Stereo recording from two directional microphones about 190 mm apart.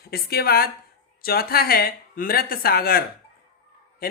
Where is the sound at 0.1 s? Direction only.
55° left (ahead or behind).